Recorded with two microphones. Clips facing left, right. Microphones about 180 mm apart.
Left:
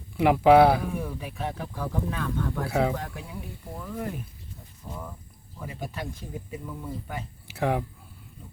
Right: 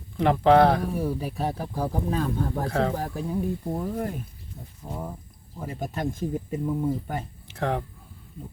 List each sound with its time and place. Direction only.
0.2 s speech: 10° left (ahead or behind)
0.9 s speech: 35° right (ahead or behind)
2.6 s speech: 10° left (ahead or behind)
2.9 s speech: 35° right (ahead or behind)
4.9 s speech: 30° right (ahead or behind)
5.5 s speech: 45° right (ahead or behind)
7.4 s speech: 10° left (ahead or behind)